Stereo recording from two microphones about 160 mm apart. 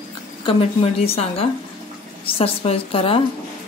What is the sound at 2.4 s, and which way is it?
Speech, 35° left (ahead or behind).